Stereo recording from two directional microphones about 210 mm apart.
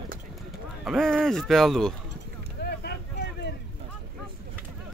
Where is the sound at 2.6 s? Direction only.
50° left (ahead or behind).